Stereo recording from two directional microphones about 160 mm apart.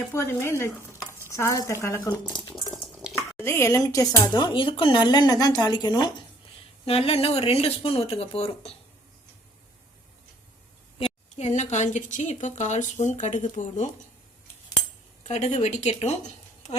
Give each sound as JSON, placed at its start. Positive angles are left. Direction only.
{"t": 0.1, "sound": "speech", "side_deg": 15}
{"t": 2.8, "sound": "stir", "side_deg": 0}
{"t": 3.3, "sound": "speech", "side_deg": 15}
{"t": 6.8, "sound": "speech", "side_deg": 35}
{"t": 11.0, "sound": "a woman's voice", "side_deg": 45}
{"t": 15.3, "sound": "speech", "side_deg": 45}